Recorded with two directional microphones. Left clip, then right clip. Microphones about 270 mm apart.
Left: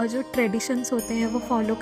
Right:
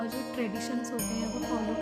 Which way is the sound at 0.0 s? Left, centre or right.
Left.